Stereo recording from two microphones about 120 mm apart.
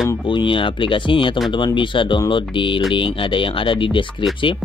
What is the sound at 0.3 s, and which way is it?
Speech, 45° left (ahead or behind).